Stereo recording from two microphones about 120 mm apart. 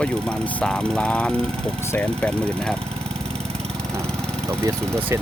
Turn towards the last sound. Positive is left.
turn(degrees=-25)  # may be behind; listen again after turning